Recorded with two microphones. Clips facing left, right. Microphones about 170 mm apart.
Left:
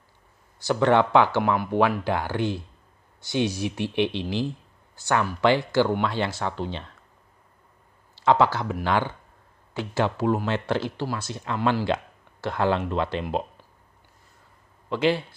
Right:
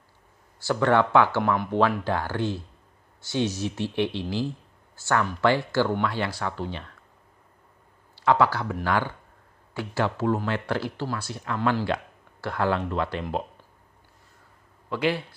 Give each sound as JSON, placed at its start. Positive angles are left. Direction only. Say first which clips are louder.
{"t": 0.6, "sound": "speech", "louder": "left 2 dB", "side_deg": 20}
{"t": 8.2, "sound": "speech", "louder": "left 1 dB", "side_deg": 20}
{"t": 14.9, "sound": "speech", "louder": "left 3 dB", "side_deg": 25}